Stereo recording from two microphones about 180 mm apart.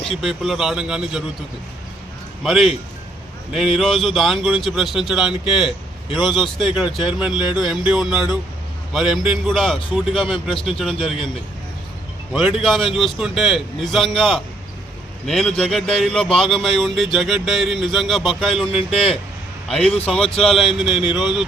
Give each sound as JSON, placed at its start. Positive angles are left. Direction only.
{"t": 0.0, "sound": "speech", "side_deg": 0}
{"t": 2.4, "sound": "speech", "side_deg": 0}
{"t": 3.8, "sound": "speech", "side_deg": 0}
{"t": 12.3, "sound": "speech", "side_deg": -5}
{"t": 18.7, "sound": "a man's voice", "side_deg": 30}
{"t": 19.6, "sound": "speech", "side_deg": 0}